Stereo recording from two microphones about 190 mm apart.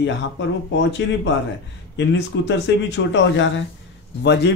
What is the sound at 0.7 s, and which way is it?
Speech, 70° left (ahead or behind).